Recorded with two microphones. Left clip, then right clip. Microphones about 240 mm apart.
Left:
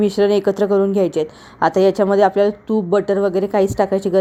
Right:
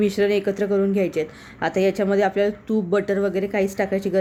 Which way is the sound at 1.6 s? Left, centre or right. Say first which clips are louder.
Left 7 dB; centre.